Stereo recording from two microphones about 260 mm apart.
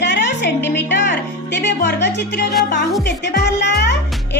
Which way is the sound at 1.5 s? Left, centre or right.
Left.